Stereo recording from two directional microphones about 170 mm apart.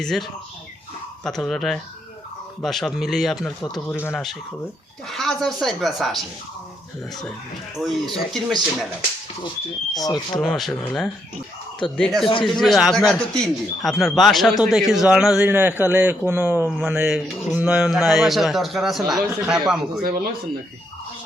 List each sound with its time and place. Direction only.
0.0 s a man's voice: 5° left (ahead or behind)
4.1 s a man's voice: centre (ahead or behind)
7.8 s a man's voice: centre (ahead or behind)
9.9 s speech: 25° left (ahead or behind)
10.4 s a man's voice: centre (ahead or behind)
11.9 s a man's voice: centre (ahead or behind)
20.0 s speech: 65° right (ahead or behind)